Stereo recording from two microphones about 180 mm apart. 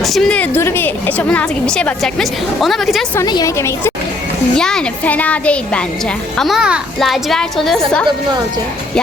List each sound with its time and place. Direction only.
0.0 s a woman's voice: centre (ahead or behind)
3.2 s speech: 20° left (ahead or behind)
4.5 s a woman's voice: 5° left (ahead or behind)